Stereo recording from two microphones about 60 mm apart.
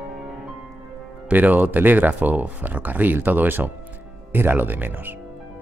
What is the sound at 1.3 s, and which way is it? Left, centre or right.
Speech, right.